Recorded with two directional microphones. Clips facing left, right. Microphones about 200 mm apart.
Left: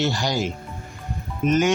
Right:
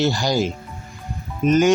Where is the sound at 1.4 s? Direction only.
35° right (ahead or behind).